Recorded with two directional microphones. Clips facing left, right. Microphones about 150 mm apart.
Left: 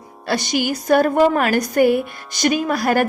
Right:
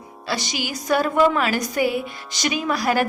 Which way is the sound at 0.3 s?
55° left (ahead or behind).